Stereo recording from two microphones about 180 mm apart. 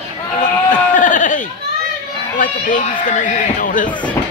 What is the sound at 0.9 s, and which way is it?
Speech, 45° left (ahead or behind).